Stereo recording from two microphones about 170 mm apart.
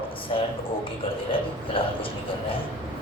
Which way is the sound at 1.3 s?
30° left (ahead or behind).